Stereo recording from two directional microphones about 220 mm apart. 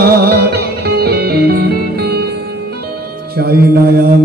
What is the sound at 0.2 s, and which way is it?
Music, 45° right (ahead or behind).